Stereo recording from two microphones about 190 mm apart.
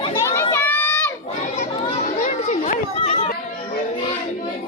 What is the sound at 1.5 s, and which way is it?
Chatter, 35° left (ahead or behind).